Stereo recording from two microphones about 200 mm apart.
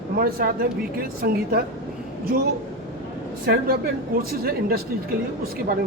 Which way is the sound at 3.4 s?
50° right (ahead or behind).